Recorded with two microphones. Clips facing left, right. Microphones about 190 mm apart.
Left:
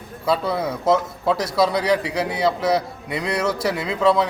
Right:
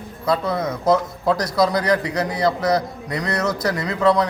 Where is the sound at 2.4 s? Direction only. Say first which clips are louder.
Right 1 dB; 5° left (ahead or behind).